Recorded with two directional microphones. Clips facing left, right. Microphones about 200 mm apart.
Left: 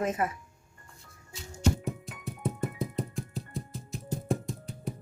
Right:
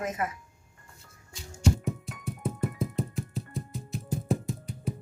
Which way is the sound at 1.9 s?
Centre (ahead or behind).